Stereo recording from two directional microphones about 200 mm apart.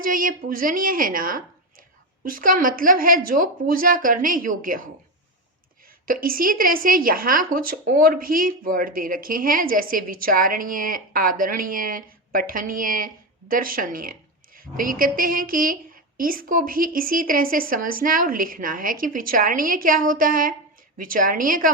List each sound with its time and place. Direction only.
0.0 s a woman's voice: 45° right (ahead or behind)
6.1 s a woman's voice: 45° right (ahead or behind)